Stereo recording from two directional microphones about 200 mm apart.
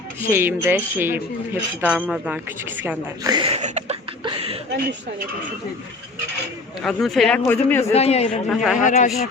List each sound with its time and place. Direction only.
0.3 s a woman's voice: 10° right (ahead or behind)
3.3 s a sound: 30° right (ahead or behind)
6.8 s speech: centre (ahead or behind)
7.9 s a man's voice: 30° left (ahead or behind)
8.4 s speech: centre (ahead or behind)
8.8 s a man's voice: 35° left (ahead or behind)